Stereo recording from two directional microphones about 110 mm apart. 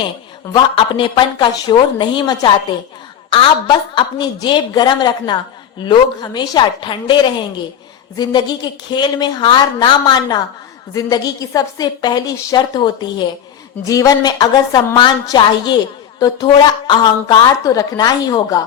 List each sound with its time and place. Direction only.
0.5 s a woman's voice: 50° left (ahead or behind)
3.2 s a woman's voice: 50° left (ahead or behind); by 18.6 s 35° left (ahead or behind)